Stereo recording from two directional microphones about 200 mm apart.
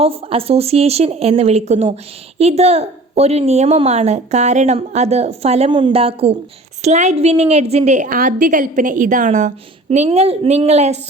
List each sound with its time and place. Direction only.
0.0 s a woman's voice: 30° right (ahead or behind)